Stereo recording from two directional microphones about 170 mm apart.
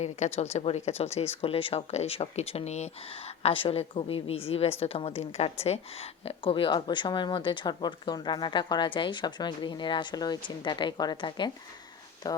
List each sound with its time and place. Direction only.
0.3 s a woman's voice: 40° left (ahead or behind); by 12.4 s 20° left (ahead or behind)